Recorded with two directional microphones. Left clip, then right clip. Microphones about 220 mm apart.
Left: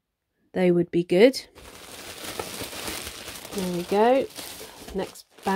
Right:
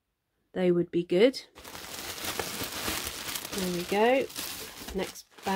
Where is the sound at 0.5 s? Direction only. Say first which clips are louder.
Left 5 dB; 25° left (ahead or behind).